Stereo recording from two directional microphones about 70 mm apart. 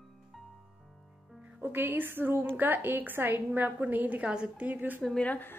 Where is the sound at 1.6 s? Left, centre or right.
Right.